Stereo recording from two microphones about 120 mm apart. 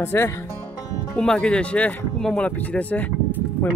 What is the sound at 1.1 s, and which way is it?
Speech, 10° left (ahead or behind).